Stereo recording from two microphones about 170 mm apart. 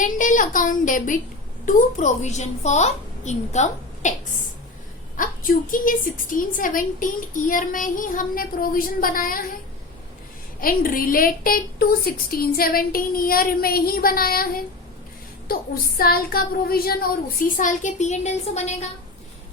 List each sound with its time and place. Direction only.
0.0 s a woman's voice: 50° left (ahead or behind)
5.1 s a woman's voice: 55° left (ahead or behind)
10.6 s a woman's voice: 55° left (ahead or behind); by 18.9 s 40° left (ahead or behind)